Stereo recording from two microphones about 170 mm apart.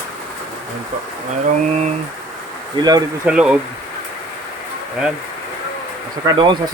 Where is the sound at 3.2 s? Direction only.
5° right (ahead or behind).